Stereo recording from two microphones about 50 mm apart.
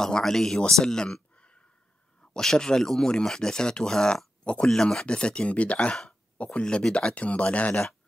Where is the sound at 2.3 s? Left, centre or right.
Centre.